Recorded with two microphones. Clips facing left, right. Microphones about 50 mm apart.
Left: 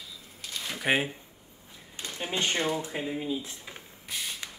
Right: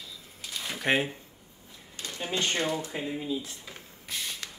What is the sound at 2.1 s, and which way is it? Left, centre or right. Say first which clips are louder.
Speech: even; centre.